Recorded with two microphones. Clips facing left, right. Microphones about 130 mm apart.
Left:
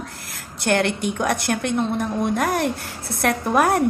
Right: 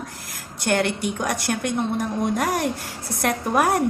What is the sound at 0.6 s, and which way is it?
A woman's voice, 15° right (ahead or behind).